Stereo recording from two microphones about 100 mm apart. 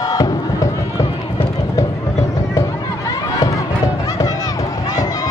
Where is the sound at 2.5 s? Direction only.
35° left (ahead or behind).